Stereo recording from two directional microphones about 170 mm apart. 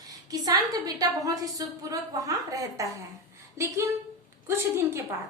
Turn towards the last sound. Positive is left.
turn(degrees=-15)  # may be behind; listen again after turning